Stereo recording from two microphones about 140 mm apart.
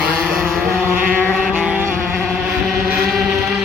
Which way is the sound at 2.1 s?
Centre (ahead or behind).